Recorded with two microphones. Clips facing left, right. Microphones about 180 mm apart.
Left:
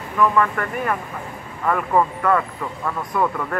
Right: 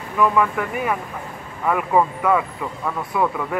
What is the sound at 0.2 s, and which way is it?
A man's voice, 5° right (ahead or behind).